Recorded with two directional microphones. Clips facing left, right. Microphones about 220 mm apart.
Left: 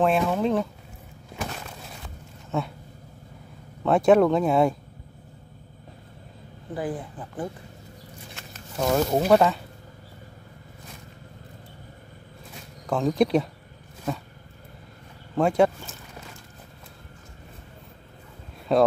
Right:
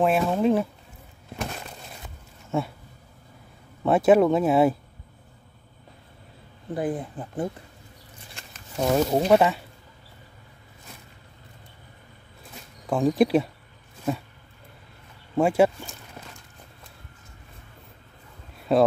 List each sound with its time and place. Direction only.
0.0 s speech: 5° right (ahead or behind)
3.8 s speech: 5° right (ahead or behind)
6.7 s speech: 25° right (ahead or behind)
8.7 s speech: 5° right (ahead or behind)
12.8 s speech: 5° right (ahead or behind)
15.3 s speech: 5° right (ahead or behind)
18.7 s speech: 5° right (ahead or behind)